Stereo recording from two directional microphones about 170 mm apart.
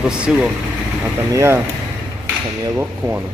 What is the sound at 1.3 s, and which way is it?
Speech, 15° right (ahead or behind).